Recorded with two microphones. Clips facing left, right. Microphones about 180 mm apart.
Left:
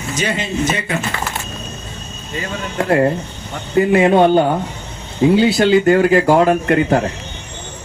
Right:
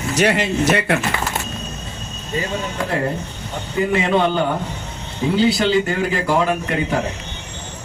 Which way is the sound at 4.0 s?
45° left (ahead or behind).